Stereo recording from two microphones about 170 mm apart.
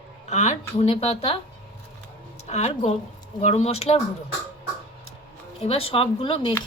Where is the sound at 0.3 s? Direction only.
45° left (ahead or behind).